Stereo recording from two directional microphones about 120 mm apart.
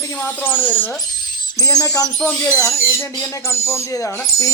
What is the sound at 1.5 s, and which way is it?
Speech, 30° left (ahead or behind).